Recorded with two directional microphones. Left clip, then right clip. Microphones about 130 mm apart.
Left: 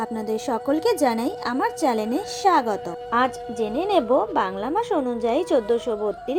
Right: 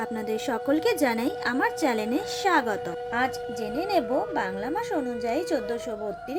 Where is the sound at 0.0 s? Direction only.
20° left (ahead or behind).